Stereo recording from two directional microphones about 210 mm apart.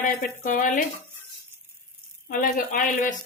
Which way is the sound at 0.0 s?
40° left (ahead or behind).